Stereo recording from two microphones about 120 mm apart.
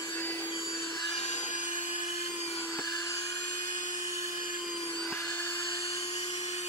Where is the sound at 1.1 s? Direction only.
70° left (ahead or behind); by 1.9 s 90° left.